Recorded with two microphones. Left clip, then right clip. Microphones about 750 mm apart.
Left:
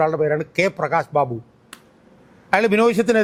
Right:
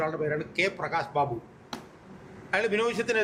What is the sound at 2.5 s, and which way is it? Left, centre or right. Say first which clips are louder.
Speech: left 10 dB; left.